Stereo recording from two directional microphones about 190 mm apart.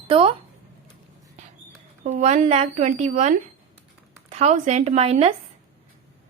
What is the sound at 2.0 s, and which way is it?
Speech, 40° right (ahead or behind).